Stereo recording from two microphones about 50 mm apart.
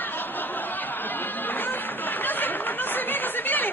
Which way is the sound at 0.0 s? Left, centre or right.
Left.